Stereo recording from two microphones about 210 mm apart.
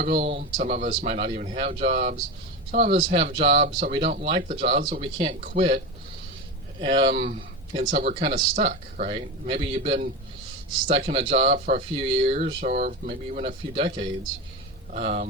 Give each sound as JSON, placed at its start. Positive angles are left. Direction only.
{"t": 0.0, "sound": "speech", "side_deg": -35}
{"t": 4.8, "sound": "speech", "side_deg": -40}
{"t": 11.5, "sound": "speech", "side_deg": -40}
{"t": 11.9, "sound": "speech", "side_deg": -25}